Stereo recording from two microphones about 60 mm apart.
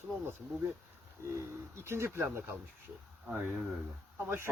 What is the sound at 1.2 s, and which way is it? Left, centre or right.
Speech, right.